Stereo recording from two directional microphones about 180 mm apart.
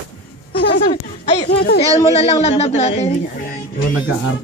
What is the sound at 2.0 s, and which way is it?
Speech, 30° left (ahead or behind).